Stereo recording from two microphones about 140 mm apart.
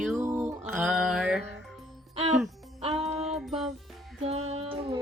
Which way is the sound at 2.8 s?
45° right (ahead or behind).